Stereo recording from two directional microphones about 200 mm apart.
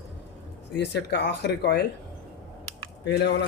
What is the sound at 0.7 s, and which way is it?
Speech, 60° left (ahead or behind).